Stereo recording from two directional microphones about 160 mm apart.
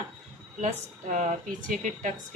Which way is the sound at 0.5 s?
50° right (ahead or behind).